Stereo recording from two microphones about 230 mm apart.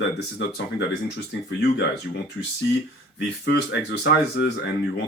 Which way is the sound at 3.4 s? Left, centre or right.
Left.